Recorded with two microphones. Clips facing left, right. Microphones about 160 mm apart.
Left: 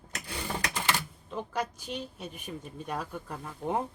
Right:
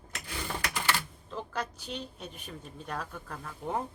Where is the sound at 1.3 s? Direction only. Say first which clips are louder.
Left 3 dB; 15° left (ahead or behind).